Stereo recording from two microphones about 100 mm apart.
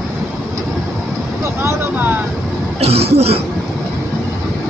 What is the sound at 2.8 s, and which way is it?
Cough, 90° right.